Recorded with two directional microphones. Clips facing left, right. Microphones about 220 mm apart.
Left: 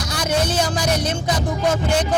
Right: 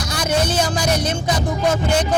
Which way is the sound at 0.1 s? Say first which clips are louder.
Right 1 dB; 10° right (ahead or behind).